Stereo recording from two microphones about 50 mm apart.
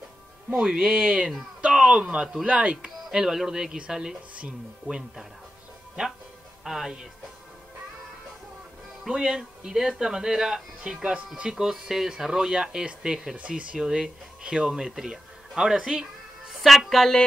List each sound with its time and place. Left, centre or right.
0.7 s speech: right
3.1 s speech: centre
6.6 s speech: centre
9.0 s a man's voice: centre
16.6 s speech: centre